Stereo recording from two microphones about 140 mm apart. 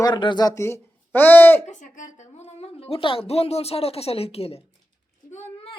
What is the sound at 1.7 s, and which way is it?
A woman's voice, 65° left (ahead or behind).